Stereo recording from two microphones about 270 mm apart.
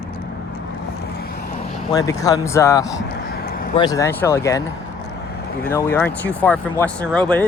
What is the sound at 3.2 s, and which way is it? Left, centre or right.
Vehicle, left.